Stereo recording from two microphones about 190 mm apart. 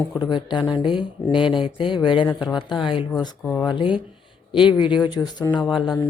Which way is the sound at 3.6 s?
25° left (ahead or behind).